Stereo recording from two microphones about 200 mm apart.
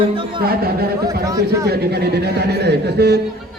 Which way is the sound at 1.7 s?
55° right (ahead or behind).